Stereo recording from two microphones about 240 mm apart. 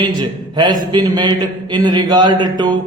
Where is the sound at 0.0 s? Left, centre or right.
Centre.